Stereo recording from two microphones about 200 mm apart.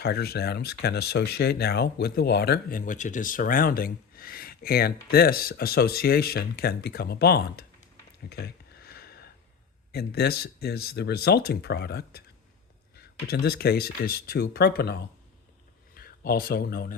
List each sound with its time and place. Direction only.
0.0 s speech: 50° left (ahead or behind)
8.3 s a sound: 50° left (ahead or behind)
9.9 s speech: 50° left (ahead or behind)